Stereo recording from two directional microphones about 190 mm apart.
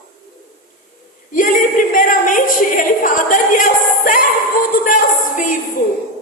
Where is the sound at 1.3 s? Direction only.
45° left (ahead or behind).